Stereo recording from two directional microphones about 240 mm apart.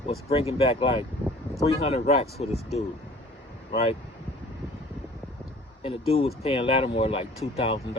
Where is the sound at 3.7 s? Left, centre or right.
Left.